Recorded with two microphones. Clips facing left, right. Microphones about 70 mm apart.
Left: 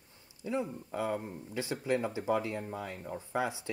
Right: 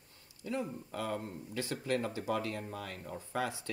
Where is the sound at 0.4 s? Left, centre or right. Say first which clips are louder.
Left 3 dB; left.